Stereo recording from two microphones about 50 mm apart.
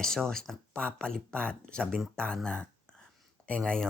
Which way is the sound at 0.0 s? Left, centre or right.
Centre.